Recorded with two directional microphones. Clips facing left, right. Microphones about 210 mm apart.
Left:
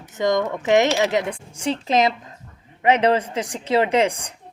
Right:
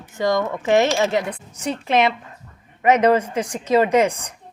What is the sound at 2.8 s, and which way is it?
A woman's voice, 30° left (ahead or behind).